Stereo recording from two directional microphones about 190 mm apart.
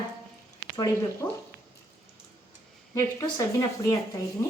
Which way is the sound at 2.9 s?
20° left (ahead or behind).